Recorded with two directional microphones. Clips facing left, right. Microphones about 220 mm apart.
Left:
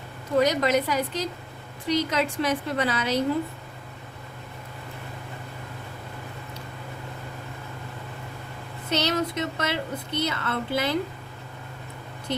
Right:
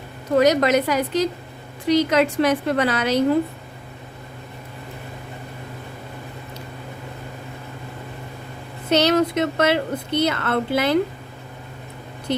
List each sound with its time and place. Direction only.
0.3 s a woman's voice: 80° right
8.9 s a woman's voice: 80° right